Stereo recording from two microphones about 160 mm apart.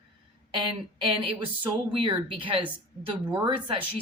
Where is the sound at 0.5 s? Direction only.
35° right (ahead or behind).